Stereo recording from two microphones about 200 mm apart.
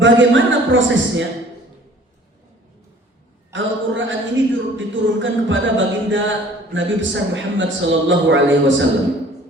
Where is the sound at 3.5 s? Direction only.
70° right (ahead or behind).